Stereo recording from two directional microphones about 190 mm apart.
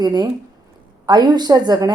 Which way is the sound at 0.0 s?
20° right (ahead or behind).